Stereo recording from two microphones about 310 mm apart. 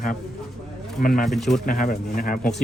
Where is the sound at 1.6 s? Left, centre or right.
Left.